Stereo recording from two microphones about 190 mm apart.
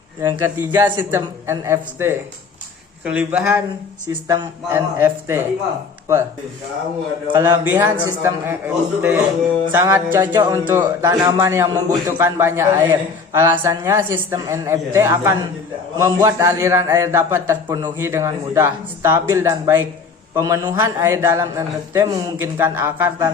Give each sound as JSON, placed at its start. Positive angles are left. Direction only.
{"t": 0.2, "sound": "a man's voice", "side_deg": -15}
{"t": 7.3, "sound": "a man's voice", "side_deg": -10}